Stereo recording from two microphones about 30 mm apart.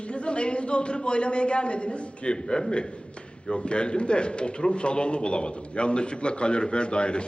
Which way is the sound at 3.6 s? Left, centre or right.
Left.